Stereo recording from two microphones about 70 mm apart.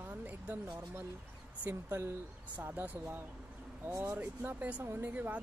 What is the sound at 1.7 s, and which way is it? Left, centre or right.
Speech, right.